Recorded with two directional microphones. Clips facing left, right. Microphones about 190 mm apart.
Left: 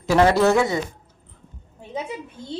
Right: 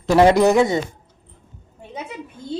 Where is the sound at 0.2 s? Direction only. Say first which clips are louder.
Right 3 dB; 15° right (ahead or behind).